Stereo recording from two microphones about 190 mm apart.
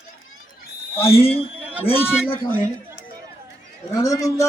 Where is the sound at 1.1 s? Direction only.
30° left (ahead or behind).